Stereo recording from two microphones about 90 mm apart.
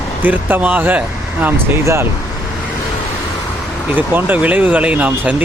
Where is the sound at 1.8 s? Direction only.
30° right (ahead or behind).